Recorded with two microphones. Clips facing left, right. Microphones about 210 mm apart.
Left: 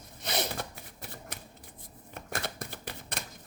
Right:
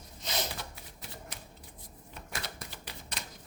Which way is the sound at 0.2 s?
60° left (ahead or behind).